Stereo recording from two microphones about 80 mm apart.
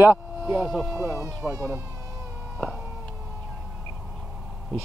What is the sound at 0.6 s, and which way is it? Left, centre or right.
Speech, centre.